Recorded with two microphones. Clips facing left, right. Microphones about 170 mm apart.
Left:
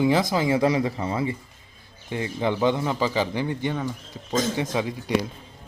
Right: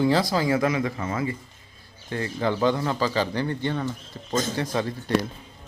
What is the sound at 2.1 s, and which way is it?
Speech, 15° left (ahead or behind).